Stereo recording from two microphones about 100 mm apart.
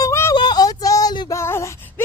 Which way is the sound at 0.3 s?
45° left (ahead or behind).